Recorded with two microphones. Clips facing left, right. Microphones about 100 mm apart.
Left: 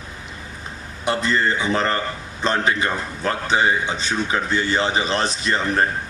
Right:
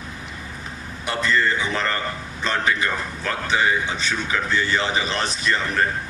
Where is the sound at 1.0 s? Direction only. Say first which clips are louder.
Left 1 dB; 30° left (ahead or behind).